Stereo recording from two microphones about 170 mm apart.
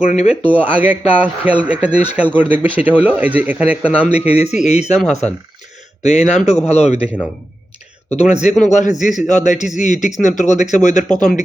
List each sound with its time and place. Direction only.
0.6 s speech: 10° right (ahead or behind)
4.4 s a man's voice: 40° left (ahead or behind)
8.1 s a man's voice: 40° left (ahead or behind)